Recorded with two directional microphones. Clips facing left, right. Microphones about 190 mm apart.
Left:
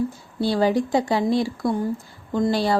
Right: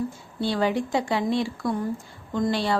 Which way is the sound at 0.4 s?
35° left (ahead or behind).